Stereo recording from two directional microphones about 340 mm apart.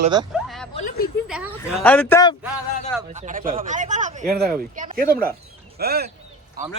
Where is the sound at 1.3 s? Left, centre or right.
Centre.